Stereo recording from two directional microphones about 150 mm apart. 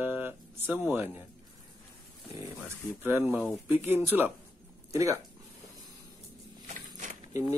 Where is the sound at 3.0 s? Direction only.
15° right (ahead or behind).